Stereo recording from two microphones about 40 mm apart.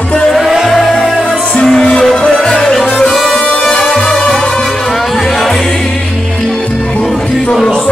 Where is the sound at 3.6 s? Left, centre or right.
Centre.